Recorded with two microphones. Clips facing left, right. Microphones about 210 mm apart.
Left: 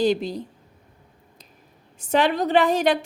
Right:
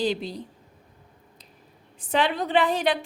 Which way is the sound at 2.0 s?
45° left (ahead or behind).